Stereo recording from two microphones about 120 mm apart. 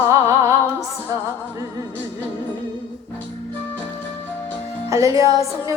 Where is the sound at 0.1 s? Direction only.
25° right (ahead or behind).